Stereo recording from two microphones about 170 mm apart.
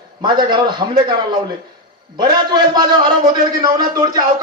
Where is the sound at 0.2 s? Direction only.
25° right (ahead or behind).